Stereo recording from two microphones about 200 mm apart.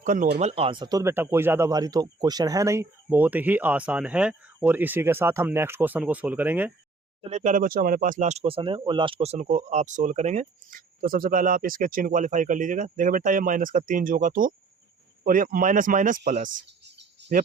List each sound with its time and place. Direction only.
0.0 s speech: 40° right (ahead or behind); by 6.7 s 10° right (ahead or behind)
7.2 s speech: 35° right (ahead or behind)
16.5 s cricket: 60° right (ahead or behind)